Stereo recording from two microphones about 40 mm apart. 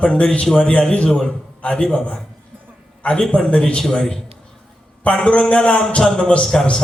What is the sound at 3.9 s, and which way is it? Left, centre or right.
A man's voice, centre.